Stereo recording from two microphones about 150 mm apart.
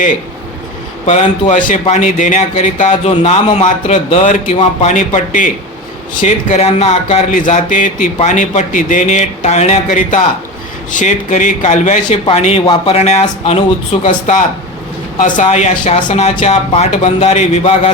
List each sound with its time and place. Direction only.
1.0 s speech: 50° left (ahead or behind)
6.2 s speech: 45° left (ahead or behind)
12.1 s speech: 40° left (ahead or behind)